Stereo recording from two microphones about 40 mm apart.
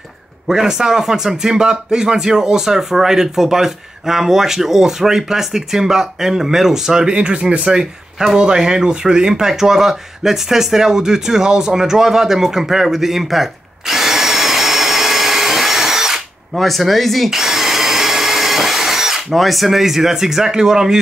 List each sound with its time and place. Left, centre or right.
0.5 s speech: centre
7.2 s speech: right; by 16.2 s centre
16.5 s speech: centre
17.3 s drill: centre
19.3 s speech: centre